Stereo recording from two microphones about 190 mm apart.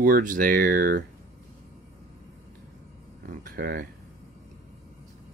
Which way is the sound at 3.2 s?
50° right (ahead or behind).